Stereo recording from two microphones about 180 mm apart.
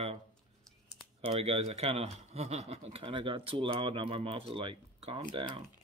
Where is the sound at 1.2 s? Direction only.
35° right (ahead or behind).